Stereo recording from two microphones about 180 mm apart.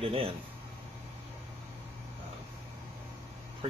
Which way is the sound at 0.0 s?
30° right (ahead or behind).